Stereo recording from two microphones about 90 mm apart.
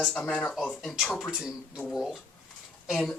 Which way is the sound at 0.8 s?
Centre (ahead or behind).